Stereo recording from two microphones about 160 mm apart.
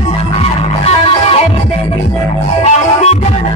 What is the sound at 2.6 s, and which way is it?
Music, 40° left (ahead or behind).